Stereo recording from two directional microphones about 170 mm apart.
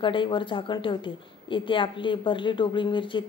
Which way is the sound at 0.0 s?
30° left (ahead or behind).